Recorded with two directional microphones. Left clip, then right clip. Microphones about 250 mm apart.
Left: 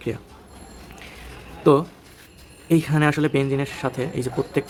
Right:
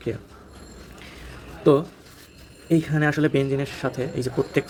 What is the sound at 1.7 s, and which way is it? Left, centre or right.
A man's voice, centre.